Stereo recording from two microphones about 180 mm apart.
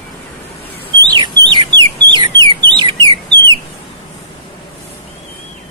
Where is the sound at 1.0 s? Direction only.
25° right (ahead or behind).